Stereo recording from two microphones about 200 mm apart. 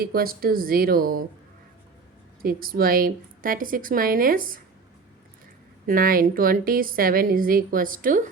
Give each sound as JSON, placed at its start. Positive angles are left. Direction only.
{"t": 0.0, "sound": "a woman's voice", "side_deg": -50}
{"t": 2.4, "sound": "a woman's voice", "side_deg": -45}
{"t": 5.8, "sound": "a woman's voice", "side_deg": -45}